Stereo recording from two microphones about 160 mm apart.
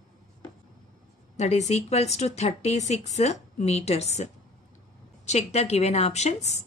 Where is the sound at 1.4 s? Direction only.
45° left (ahead or behind).